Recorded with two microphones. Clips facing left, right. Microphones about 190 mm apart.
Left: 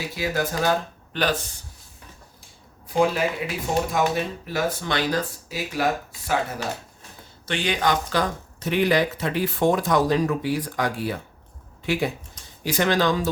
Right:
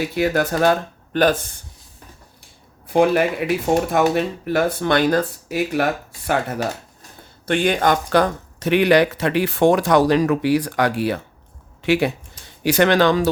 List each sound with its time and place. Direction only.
0.2 s speech: 60° right (ahead or behind)
2.9 s speech: 60° right (ahead or behind)
7.4 s speech: 50° right (ahead or behind); by 13.3 s 75° right (ahead or behind)